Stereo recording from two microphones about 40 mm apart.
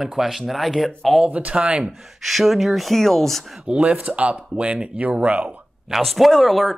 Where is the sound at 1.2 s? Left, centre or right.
Right.